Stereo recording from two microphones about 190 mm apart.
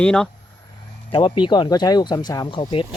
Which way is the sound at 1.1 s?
25° left (ahead or behind).